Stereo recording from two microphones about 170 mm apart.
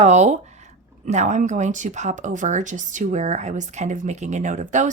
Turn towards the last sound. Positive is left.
turn(degrees=-45)  # may be behind; listen again after turning